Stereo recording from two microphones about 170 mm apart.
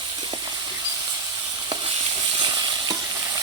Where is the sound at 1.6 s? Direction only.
25° right (ahead or behind).